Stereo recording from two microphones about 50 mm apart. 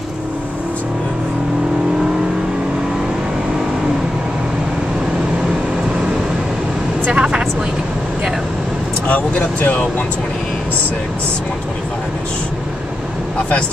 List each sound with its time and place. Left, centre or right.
7.1 s vehicle: centre
9.0 s vehicle: left